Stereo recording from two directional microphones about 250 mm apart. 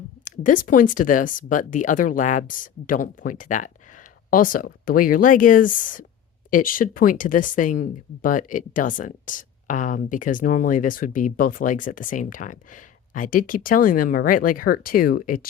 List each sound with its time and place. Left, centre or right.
0.3 s speech: left